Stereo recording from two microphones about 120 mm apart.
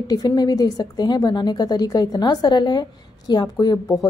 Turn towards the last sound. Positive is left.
turn(degrees=35)  # may be behind; listen again after turning